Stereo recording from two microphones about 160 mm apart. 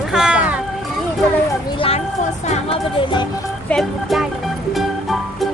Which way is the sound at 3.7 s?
Centre (ahead or behind).